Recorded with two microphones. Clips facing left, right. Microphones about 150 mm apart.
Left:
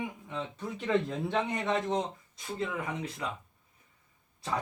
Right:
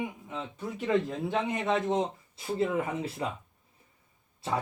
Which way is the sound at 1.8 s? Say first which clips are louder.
Right 3 dB; 20° right (ahead or behind).